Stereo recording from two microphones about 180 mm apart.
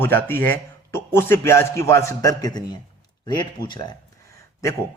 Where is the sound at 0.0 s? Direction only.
10° left (ahead or behind).